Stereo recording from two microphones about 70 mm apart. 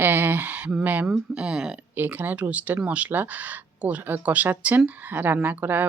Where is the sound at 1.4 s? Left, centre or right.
Centre.